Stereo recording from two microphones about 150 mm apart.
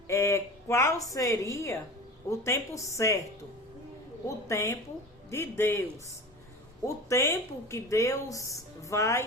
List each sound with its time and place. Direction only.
0.1 s speech: 20° left (ahead or behind)
4.3 s a man's voice: 20° left (ahead or behind)
6.8 s speech: 20° left (ahead or behind)